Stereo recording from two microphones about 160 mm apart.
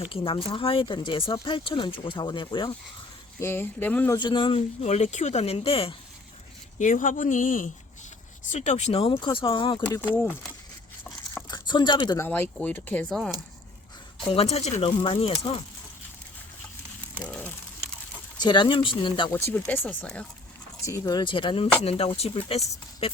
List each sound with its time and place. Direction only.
0.0 s speech: 35° left (ahead or behind)
3.4 s speech: 15° left (ahead or behind)
4.2 s speech: 30° left (ahead or behind)
6.7 s speech: 55° left (ahead or behind)
8.4 s speech: 45° left (ahead or behind); by 9.8 s 30° left (ahead or behind)
10.0 s speech: 10° left (ahead or behind)
11.4 s speech: 25° left (ahead or behind)
12.2 s speech: 10° left (ahead or behind)
14.2 s speech: 35° left (ahead or behind)
17.2 s a sound: 10° left (ahead or behind)
18.3 s speech: 30° left (ahead or behind)
19.3 s speech: 15° left (ahead or behind)
20.8 s speech: 20° left (ahead or behind); by 23.1 s 35° left (ahead or behind)